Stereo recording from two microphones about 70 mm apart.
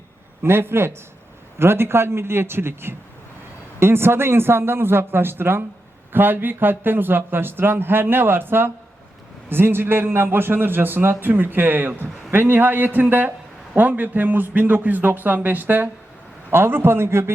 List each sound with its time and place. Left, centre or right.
0.4 s a man's voice: right